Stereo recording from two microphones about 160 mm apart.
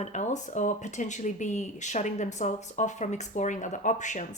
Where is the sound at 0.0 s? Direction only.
50° left (ahead or behind).